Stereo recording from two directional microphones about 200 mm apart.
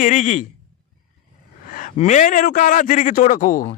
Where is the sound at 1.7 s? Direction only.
40° left (ahead or behind).